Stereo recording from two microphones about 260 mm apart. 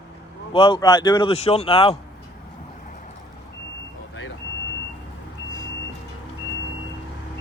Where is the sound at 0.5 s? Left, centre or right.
Centre.